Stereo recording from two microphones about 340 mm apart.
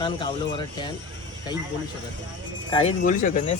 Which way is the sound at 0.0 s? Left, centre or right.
Centre.